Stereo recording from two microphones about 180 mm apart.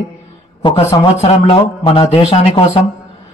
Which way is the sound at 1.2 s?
30° left (ahead or behind).